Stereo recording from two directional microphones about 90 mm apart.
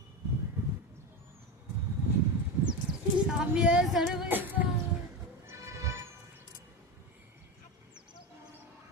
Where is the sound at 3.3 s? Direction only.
5° right (ahead or behind).